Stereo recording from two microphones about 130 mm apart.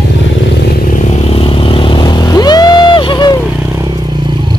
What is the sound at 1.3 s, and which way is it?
Vehicle, 45° left (ahead or behind).